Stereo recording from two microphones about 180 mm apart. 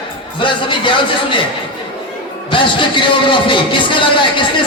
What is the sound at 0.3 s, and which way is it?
A man's voice, 25° left (ahead or behind).